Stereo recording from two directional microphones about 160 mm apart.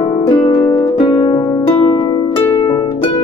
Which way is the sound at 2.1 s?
35° left (ahead or behind).